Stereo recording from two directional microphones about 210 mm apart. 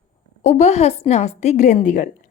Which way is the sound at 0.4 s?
30° left (ahead or behind).